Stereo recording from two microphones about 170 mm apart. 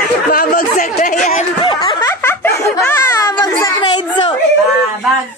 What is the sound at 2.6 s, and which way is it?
A child's voice, 20° left (ahead or behind).